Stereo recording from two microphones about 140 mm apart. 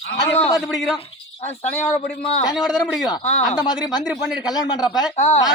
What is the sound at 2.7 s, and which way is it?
Speech, 5° right (ahead or behind).